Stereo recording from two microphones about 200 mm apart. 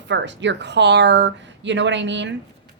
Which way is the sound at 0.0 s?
65° right (ahead or behind).